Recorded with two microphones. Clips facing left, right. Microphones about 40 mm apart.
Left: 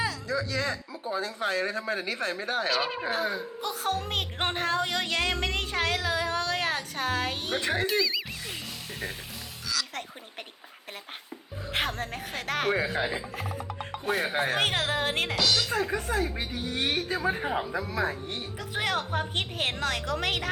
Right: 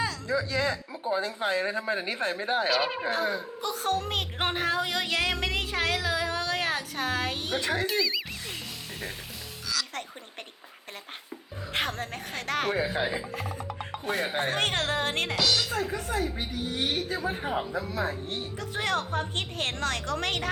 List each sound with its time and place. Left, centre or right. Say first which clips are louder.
0.3 s speech: right 2 dB; right
2.6 s speech: right 1 dB; centre
7.6 s speech: left 1 dB; left
7.9 s speech: left 1 dB; centre
9.6 s music: even; centre
11.7 s speech: left 1 dB; centre
15.9 s a woman's voice: left 1 dB; left
17.2 s a man's voice: left 2 dB; left
18.7 s a woman's voice: even; centre